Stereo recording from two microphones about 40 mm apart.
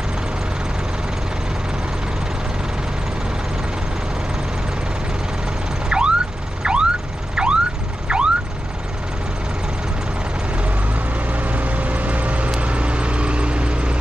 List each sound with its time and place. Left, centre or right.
5.9 s vehicle: right
8.1 s car alarm: right
10.6 s vehicle: right